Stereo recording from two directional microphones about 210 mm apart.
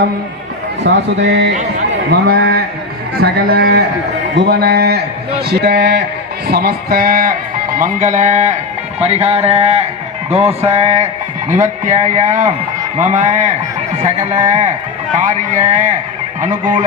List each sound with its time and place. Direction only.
0.8 s a man's voice: 55° right (ahead or behind)
2.0 s speech: 45° right (ahead or behind)
9.0 s a sound: 30° right (ahead or behind)
10.3 s speech: 30° right (ahead or behind)